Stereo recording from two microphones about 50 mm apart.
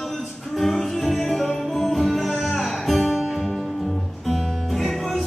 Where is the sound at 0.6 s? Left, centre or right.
Centre.